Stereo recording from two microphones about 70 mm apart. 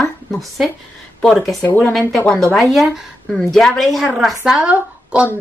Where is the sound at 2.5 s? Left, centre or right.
Centre.